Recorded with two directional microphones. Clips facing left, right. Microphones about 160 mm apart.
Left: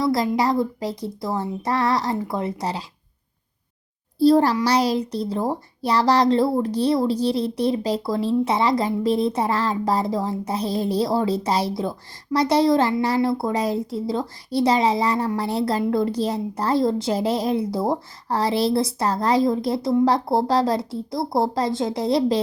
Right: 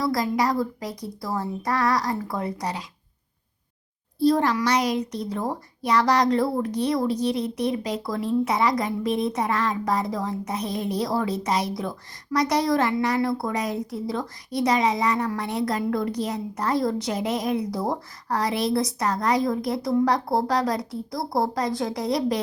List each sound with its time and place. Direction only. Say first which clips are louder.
0.0 s a child's voice: left 3 dB; 25° left (ahead or behind)
4.2 s a child's voice: left 4 dB; 30° left (ahead or behind)